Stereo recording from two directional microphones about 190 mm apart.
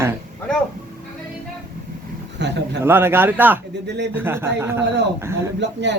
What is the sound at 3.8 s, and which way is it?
Speech, 65° right (ahead or behind).